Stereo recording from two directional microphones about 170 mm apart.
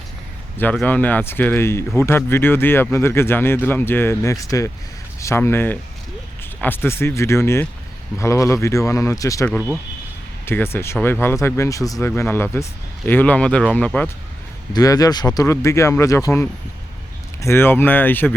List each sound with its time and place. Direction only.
0.5 s speech: 10° left (ahead or behind)
14.7 s speech: 20° left (ahead or behind)